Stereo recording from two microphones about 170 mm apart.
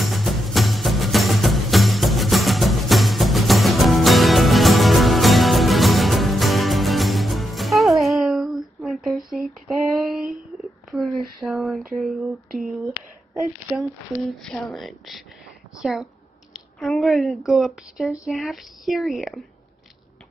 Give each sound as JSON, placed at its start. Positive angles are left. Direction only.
{"t": 0.0, "sound": "music", "side_deg": 0}
{"t": 10.0, "sound": "a sound", "side_deg": 0}
{"t": 11.4, "sound": "a woman's voice", "side_deg": 0}